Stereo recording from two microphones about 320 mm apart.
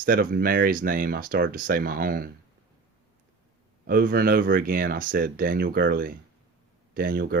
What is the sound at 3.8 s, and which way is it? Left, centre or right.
Speech, right.